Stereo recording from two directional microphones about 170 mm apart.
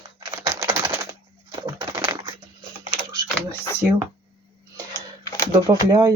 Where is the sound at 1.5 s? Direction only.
20° right (ahead or behind).